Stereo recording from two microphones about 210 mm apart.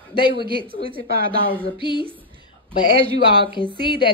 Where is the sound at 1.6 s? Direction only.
20° left (ahead or behind).